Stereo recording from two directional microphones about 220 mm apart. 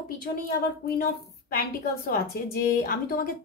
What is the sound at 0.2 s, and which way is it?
A woman's voice, 40° left (ahead or behind).